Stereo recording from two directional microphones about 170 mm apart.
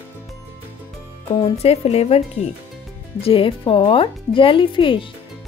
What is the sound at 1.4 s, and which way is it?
Speech, 35° left (ahead or behind).